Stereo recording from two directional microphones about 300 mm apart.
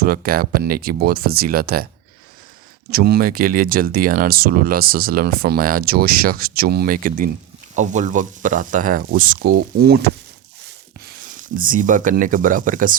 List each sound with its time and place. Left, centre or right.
0.0 s speech: right
2.9 s speech: right